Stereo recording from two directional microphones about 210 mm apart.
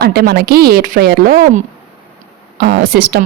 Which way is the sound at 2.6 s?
45° right (ahead or behind).